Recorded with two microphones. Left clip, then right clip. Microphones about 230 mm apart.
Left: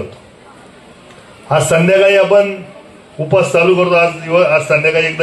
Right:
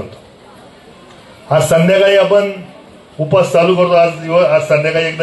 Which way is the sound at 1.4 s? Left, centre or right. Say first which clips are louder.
Right 1 dB; left.